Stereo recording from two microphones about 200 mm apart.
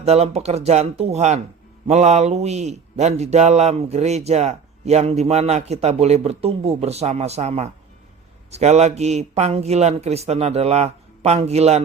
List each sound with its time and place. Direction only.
0.0 s mantra: 30° right (ahead or behind)